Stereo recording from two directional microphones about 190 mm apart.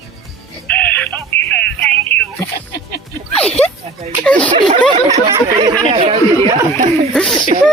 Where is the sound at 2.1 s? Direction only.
10° left (ahead or behind).